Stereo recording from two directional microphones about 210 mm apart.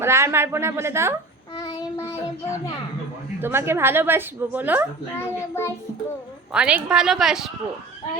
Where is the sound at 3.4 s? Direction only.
10° right (ahead or behind).